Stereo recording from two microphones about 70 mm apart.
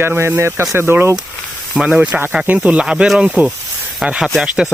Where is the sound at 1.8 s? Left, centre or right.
Centre.